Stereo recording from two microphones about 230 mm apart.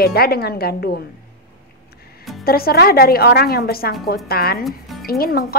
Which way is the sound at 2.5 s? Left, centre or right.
Left.